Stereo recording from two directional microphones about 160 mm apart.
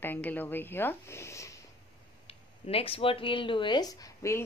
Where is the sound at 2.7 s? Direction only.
35° left (ahead or behind); by 4.4 s 20° left (ahead or behind).